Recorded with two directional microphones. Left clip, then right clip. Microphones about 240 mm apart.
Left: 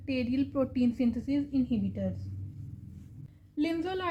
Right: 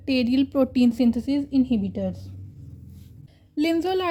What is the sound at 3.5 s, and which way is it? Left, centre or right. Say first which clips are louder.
Speech: right 9 dB; right.